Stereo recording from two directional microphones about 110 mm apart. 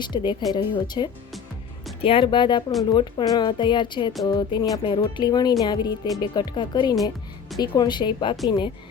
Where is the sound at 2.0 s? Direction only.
55° left (ahead or behind).